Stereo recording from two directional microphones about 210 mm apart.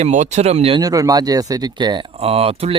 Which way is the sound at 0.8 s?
15° right (ahead or behind).